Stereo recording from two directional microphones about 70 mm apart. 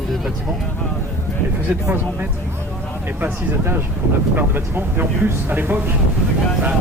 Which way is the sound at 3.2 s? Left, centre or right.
Right.